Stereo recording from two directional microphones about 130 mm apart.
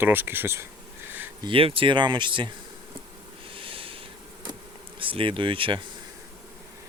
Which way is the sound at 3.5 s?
45° right (ahead or behind).